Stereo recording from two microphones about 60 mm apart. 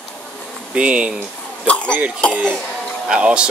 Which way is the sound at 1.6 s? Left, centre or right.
Left.